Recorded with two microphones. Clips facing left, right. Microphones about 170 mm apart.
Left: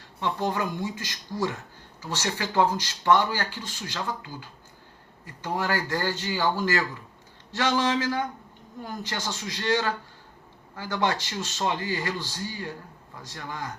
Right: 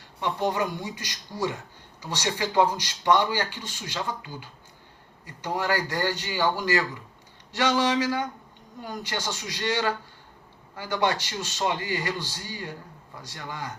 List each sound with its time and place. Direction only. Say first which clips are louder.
0.2 s speech: right 1 dB; 20° right (ahead or behind)
13.3 s speech: left 1 dB; 20° right (ahead or behind)